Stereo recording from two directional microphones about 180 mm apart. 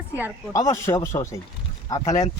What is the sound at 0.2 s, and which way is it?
Speech, 10° right (ahead or behind).